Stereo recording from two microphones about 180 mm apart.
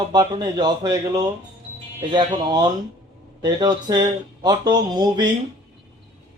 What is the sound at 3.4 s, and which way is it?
Speech, 25° right (ahead or behind).